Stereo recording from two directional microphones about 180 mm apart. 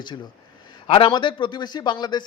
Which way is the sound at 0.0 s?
25° left (ahead or behind).